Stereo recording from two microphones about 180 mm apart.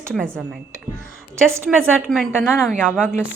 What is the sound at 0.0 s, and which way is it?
Speech, 5° left (ahead or behind).